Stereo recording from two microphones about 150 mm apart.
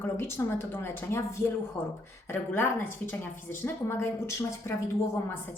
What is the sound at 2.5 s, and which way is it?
A woman's voice, 15° left (ahead or behind).